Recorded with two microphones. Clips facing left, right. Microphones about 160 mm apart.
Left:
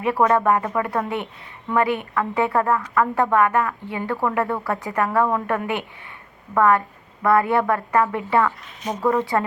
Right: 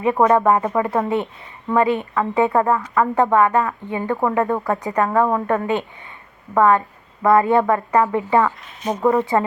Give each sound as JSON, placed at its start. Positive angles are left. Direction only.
{"t": 0.0, "sound": "a woman's voice", "side_deg": -20}